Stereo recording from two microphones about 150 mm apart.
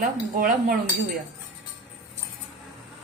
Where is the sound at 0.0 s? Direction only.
70° right (ahead or behind).